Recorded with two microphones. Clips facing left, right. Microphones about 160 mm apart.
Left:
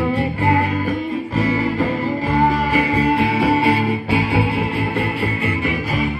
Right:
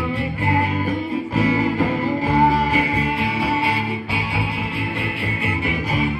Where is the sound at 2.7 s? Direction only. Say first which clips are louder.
Left 4 dB; 45° left (ahead or behind).